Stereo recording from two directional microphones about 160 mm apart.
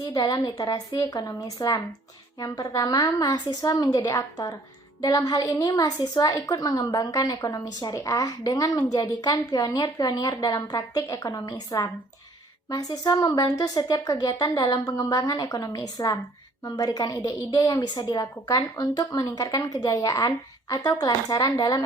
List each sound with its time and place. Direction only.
0.0 s a woman's voice: 25° left (ahead or behind)